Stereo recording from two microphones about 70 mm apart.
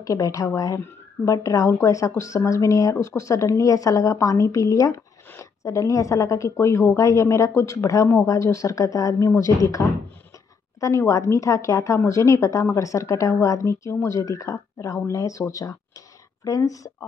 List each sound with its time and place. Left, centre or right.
0.0 s speech: left